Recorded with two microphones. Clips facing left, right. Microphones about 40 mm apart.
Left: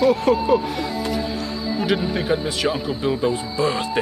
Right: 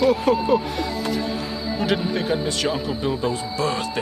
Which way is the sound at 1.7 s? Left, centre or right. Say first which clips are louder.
Left 1 dB; centre.